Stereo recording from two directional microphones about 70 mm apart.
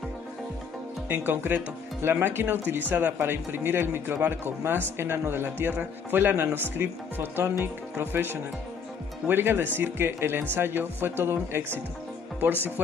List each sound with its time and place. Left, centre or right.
1.0 s speech: right